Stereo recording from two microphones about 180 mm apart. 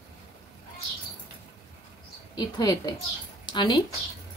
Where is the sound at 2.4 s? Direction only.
20° left (ahead or behind).